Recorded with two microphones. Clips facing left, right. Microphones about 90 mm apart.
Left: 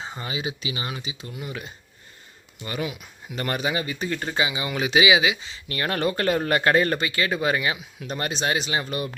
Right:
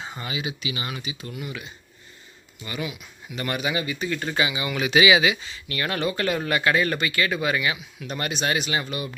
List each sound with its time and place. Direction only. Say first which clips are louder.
0.0 s speech: left 1 dB; 30° left (ahead or behind)
1.5 s speech: left 1 dB; 40° left (ahead or behind); by 5.5 s 20° left (ahead or behind)
5.6 s speech: left 1 dB; 35° left (ahead or behind)